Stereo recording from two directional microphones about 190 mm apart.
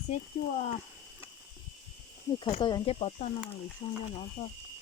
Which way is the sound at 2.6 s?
25° left (ahead or behind).